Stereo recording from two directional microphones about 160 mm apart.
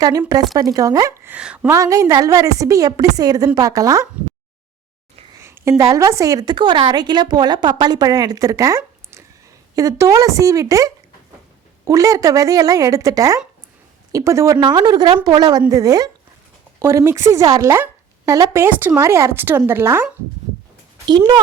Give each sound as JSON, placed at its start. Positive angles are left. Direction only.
{"t": 0.0, "sound": "a woman's voice", "side_deg": -20}
{"t": 1.3, "sound": "a woman's voice", "side_deg": -10}
{"t": 5.3, "sound": "a woman's voice", "side_deg": -15}
{"t": 21.1, "sound": "a woman's voice", "side_deg": -25}